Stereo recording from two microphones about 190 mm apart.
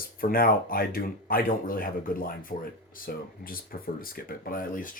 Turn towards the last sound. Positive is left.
turn(degrees=45)  # may be behind; listen again after turning